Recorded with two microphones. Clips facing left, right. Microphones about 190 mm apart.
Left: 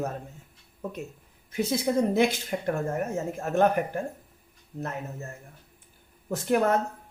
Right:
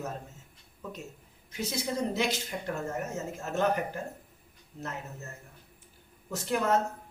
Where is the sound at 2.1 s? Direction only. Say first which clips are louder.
Left 7 dB; 55° left (ahead or behind).